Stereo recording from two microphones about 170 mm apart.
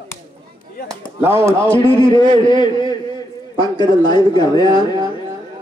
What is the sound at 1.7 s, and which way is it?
A man's voice, 30° left (ahead or behind).